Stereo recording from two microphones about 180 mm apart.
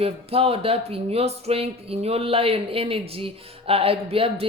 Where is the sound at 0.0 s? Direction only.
35° right (ahead or behind).